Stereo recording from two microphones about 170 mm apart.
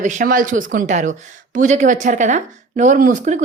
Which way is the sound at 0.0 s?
50° right (ahead or behind).